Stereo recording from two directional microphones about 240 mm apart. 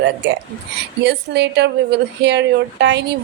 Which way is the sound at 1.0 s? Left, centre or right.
Right.